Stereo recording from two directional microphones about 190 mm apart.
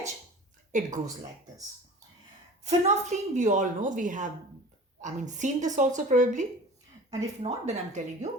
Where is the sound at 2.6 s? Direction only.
35° right (ahead or behind).